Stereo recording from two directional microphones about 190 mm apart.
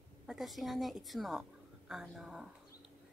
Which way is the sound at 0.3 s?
Centre (ahead or behind).